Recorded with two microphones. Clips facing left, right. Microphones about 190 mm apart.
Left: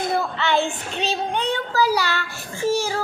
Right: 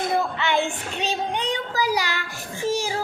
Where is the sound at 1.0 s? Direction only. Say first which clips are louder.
Left 2 dB; 15° right (ahead or behind).